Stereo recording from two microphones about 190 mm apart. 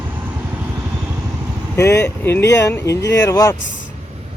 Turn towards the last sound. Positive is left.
turn(degrees=15)  # may be behind; listen again after turning